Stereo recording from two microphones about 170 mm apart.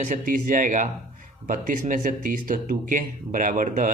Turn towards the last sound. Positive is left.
turn(degrees=-50)  # may be behind; listen again after turning